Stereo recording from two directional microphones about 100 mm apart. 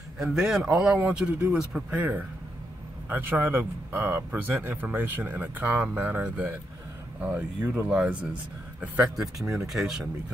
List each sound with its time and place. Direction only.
0.2 s speech: 5° right (ahead or behind)
9.4 s speech: 30° right (ahead or behind)
9.7 s speech: 5° right (ahead or behind)